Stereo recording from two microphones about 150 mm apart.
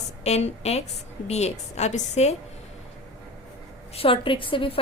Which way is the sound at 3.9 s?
35° left (ahead or behind).